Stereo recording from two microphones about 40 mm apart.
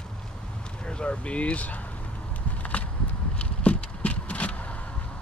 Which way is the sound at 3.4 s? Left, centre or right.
Left.